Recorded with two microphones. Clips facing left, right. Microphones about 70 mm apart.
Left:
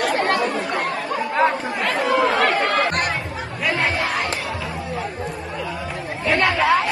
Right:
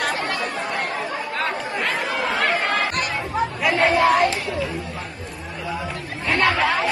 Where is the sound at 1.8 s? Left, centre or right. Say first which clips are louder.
Left 7 dB; centre.